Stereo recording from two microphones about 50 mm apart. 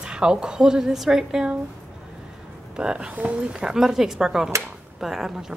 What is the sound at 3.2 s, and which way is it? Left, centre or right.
Speech, right.